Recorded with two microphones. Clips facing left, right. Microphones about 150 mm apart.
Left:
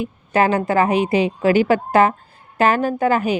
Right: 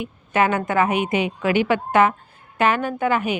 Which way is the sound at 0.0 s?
35° left (ahead or behind).